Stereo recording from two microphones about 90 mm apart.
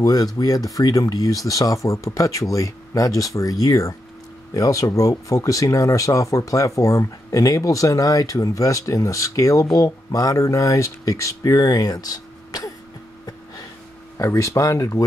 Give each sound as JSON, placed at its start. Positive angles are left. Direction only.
{"t": 0.0, "sound": "speech", "side_deg": 45}
{"t": 14.1, "sound": "speech", "side_deg": 35}